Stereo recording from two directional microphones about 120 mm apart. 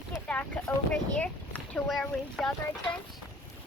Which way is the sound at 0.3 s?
10° left (ahead or behind).